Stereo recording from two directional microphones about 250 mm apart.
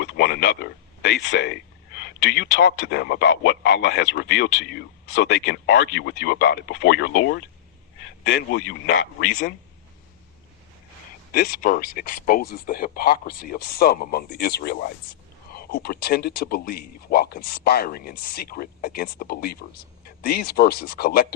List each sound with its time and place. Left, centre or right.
0.0 s a man's voice: left
11.3 s speech: left